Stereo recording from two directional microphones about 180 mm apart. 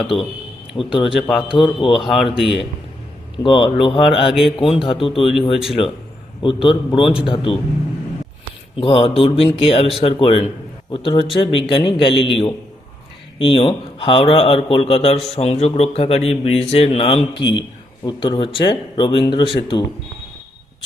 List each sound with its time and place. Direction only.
0.0 s speech: centre (ahead or behind)
3.4 s speech: 30° left (ahead or behind)
4.3 s speech: centre (ahead or behind)
4.5 s speech: 30° left (ahead or behind)
6.4 s speech: 30° left (ahead or behind)
8.8 s speech: 30° left (ahead or behind)